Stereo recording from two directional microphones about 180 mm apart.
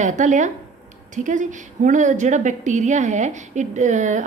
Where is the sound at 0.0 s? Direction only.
40° right (ahead or behind).